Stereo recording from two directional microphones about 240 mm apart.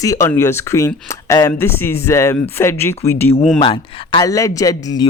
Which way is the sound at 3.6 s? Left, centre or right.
Centre.